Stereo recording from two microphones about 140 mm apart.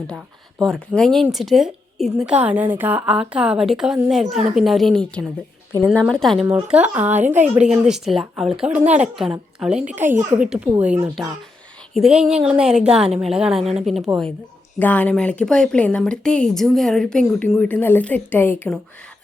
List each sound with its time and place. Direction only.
0.2 s speech: centre (ahead or behind)
6.7 s speech: 10° right (ahead or behind)
8.8 s a woman's voice: 50° right (ahead or behind)
9.3 s a woman's voice: 5° right (ahead or behind)
14.8 s speech: 10° left (ahead or behind)